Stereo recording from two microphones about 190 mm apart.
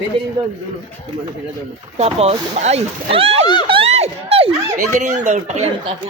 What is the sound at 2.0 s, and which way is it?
Speech, 35° right (ahead or behind).